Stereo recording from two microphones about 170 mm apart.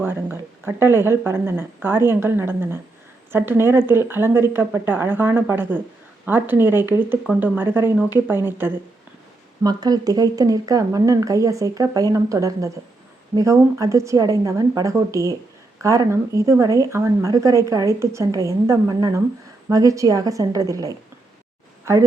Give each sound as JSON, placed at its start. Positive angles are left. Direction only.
{"t": 0.0, "sound": "a woman's voice", "side_deg": -10}
{"t": 9.6, "sound": "a woman's voice", "side_deg": -25}